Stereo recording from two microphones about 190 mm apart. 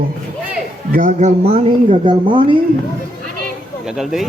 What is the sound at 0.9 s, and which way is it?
Speech, 40° right (ahead or behind).